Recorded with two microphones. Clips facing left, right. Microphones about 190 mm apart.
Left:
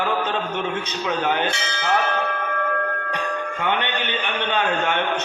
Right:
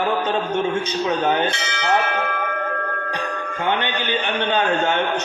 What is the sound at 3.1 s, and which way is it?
A man's voice, 35° right (ahead or behind).